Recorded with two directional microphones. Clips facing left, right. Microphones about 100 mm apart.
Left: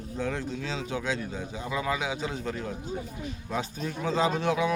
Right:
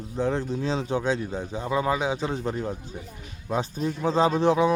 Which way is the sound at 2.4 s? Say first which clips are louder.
Right 4 dB; 25° right (ahead or behind).